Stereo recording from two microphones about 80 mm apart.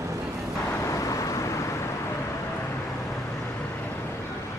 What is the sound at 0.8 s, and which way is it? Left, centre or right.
Vehicle, left.